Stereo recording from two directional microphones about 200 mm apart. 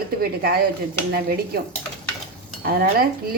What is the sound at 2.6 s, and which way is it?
Speech, 50° right (ahead or behind).